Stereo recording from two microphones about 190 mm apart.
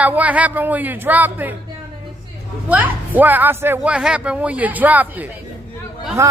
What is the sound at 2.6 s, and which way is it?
Speech, 10° right (ahead or behind).